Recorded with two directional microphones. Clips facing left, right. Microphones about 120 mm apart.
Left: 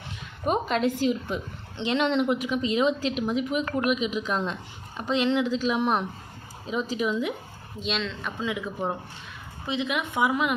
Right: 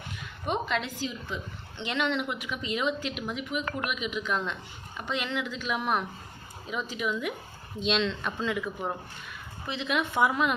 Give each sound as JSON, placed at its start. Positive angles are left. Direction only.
{"t": 0.4, "sound": "a sound", "side_deg": 40}
{"t": 1.8, "sound": "a woman's voice", "side_deg": 35}
{"t": 7.8, "sound": "speech", "side_deg": 0}
{"t": 8.4, "sound": "speech", "side_deg": 15}